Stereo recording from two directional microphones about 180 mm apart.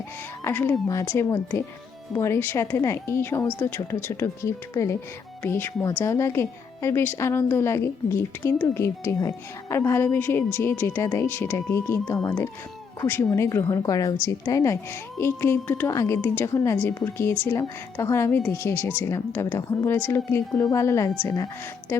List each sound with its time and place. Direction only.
0.4 s speech: 15° left (ahead or behind)